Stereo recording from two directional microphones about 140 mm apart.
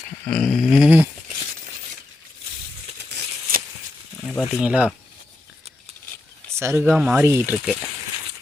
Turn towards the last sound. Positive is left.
turn(degrees=-20)  # may be behind; listen again after turning